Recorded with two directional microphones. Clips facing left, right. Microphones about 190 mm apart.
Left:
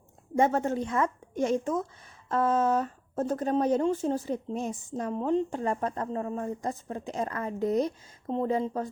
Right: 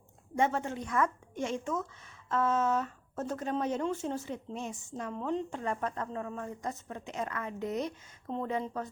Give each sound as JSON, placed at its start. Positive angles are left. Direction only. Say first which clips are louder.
{"t": 0.3, "sound": "speech", "louder": "left 6 dB", "side_deg": 40}
{"t": 0.9, "sound": "a woman's voice", "louder": "left 2 dB", "side_deg": 25}